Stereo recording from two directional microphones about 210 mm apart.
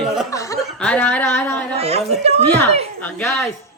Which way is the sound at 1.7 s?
30° right (ahead or behind).